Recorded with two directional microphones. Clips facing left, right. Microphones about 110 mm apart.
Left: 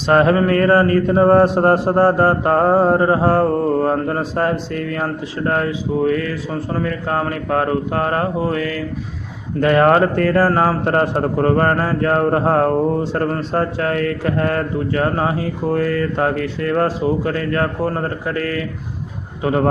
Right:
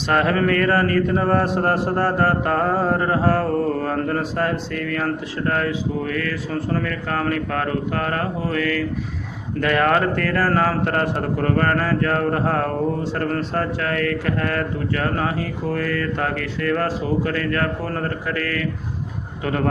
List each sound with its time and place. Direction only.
0.1 s a man's voice: 30° left (ahead or behind)